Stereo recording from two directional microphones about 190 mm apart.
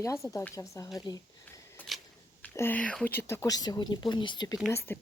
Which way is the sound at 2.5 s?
10° left (ahead or behind).